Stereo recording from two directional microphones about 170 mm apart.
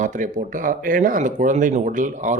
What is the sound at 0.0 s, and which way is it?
Speech, 50° right (ahead or behind).